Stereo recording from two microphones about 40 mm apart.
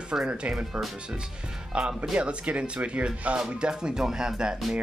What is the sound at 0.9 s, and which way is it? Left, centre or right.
Speech, right.